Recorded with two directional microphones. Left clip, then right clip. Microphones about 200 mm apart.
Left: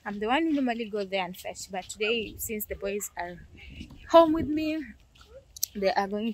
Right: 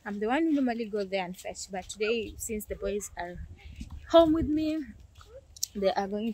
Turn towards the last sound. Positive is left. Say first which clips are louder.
# left 2 dB
turn(degrees=0)  # may be behind; listen again after turning